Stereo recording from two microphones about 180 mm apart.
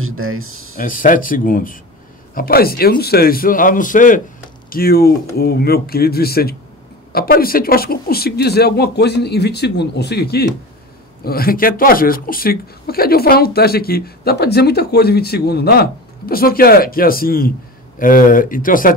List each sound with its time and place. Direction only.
0.7 s a man's voice: 50° left (ahead or behind)